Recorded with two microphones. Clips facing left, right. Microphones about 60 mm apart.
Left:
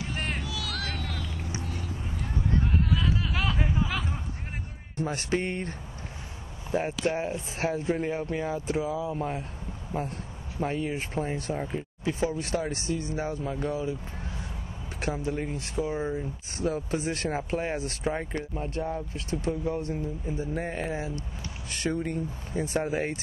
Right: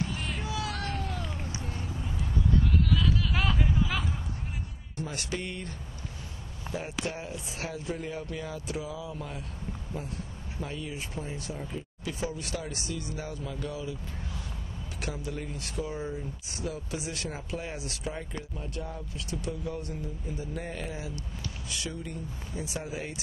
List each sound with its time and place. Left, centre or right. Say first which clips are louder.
0.0 s music: left 1 dB; left
0.4 s music: right 1 dB; right
1.6 s a sound: left 2 dB; right
2.6 s a sound: even; left
3.5 s hubbub: even; left
4.9 s speech: left 6 dB; left
15.0 s speech: left 6 dB; left
16.6 s speech: left 7 dB; left
21.7 s speech: left 10 dB; left